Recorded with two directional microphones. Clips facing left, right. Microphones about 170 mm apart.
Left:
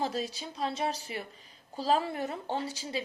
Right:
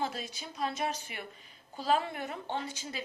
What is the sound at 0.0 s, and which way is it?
A woman's voice, 35° left (ahead or behind).